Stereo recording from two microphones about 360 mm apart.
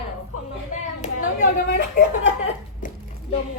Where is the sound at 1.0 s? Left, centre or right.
Left.